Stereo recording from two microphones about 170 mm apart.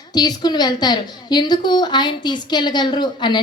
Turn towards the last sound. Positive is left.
turn(degrees=25)  # may be behind; listen again after turning